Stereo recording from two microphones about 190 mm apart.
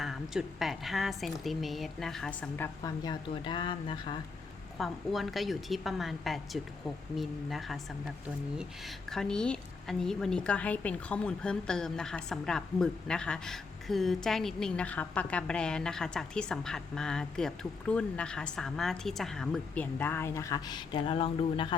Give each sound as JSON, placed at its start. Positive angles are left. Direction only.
{"t": 0.0, "sound": "a woman's voice", "side_deg": 0}
{"t": 2.8, "sound": "speech", "side_deg": 20}
{"t": 4.8, "sound": "a woman's voice", "side_deg": 0}